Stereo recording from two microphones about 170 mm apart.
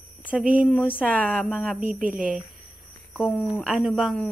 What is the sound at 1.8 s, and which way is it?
Speech, 50° right (ahead or behind).